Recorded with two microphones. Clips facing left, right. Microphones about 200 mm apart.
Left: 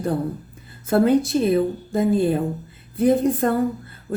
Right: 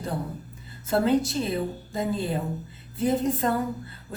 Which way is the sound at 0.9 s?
50° left (ahead or behind).